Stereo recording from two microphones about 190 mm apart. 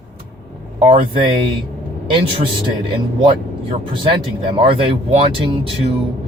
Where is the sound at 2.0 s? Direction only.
25° right (ahead or behind).